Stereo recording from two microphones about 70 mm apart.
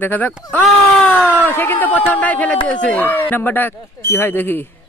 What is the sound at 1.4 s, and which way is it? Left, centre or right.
Speech, left.